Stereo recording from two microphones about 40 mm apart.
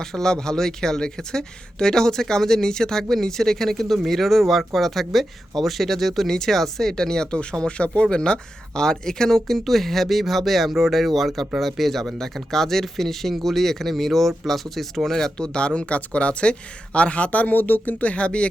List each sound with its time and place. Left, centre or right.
0.0 s speech: centre
15.4 s speech: left
17.6 s speech: left
18.0 s speech: left